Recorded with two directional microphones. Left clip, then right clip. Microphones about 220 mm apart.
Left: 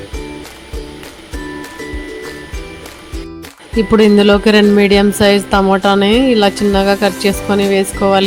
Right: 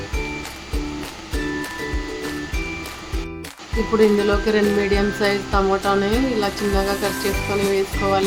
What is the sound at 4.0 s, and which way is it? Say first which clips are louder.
Speech: left 7 dB; 35° left (ahead or behind).